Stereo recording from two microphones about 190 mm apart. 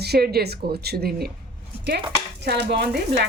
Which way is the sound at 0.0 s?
55° right (ahead or behind).